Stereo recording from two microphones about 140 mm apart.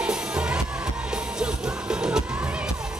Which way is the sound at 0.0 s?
5° right (ahead or behind).